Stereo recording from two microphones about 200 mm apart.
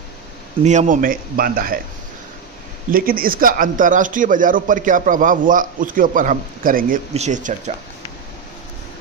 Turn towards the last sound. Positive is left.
turn(degrees=-35)  # may be behind; listen again after turning